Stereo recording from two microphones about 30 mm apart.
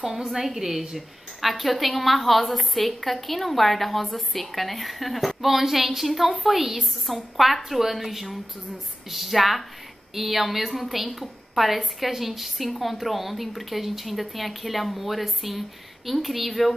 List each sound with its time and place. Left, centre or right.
0.0 s a woman's voice: centre
0.6 s a woman's voice: centre